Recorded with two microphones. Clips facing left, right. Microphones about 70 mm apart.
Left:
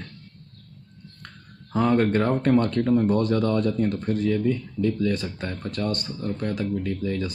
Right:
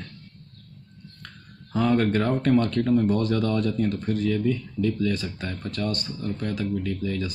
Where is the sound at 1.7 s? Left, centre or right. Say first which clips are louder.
Left 1 dB; left.